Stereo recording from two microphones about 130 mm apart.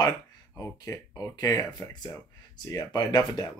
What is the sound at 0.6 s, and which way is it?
Speech, 25° left (ahead or behind).